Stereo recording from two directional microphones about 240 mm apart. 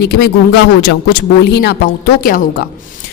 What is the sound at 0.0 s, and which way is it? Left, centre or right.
Speech, left.